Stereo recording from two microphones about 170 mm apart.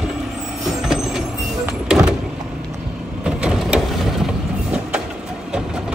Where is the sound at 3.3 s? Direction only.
5° right (ahead or behind).